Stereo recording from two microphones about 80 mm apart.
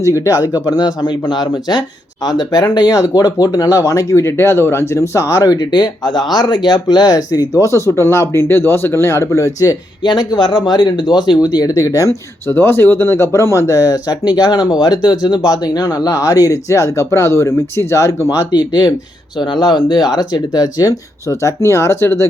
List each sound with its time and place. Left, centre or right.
0.0 s speech: left
5.7 s speech: left
10.0 s speech: left
18.5 s speech: left
19.4 s speech: left
19.6 s speech: left